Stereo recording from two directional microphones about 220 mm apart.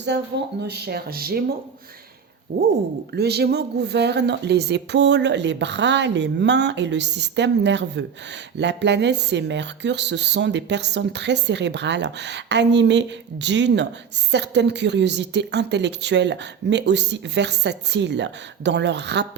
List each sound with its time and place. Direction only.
0.1 s speech: 50° right (ahead or behind)
2.5 s a sound: 40° right (ahead or behind)
3.2 s speech: 45° right (ahead or behind)